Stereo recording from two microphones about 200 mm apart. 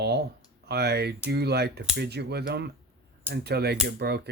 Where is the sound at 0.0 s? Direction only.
55° right (ahead or behind).